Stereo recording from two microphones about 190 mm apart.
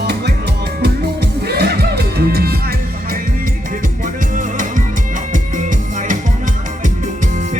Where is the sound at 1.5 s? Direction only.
55° right (ahead or behind).